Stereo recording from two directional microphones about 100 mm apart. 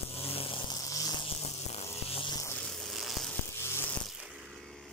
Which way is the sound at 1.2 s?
90° left.